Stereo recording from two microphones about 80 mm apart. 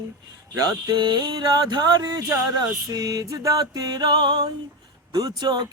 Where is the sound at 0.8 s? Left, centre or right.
Right.